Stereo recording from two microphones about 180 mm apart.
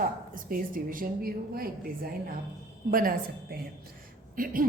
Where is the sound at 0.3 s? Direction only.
50° right (ahead or behind).